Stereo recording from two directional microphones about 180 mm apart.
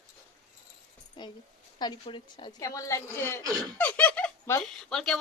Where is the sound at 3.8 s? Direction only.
10° left (ahead or behind).